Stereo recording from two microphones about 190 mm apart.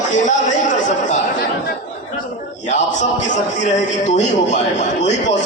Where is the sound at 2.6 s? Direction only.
40° left (ahead or behind).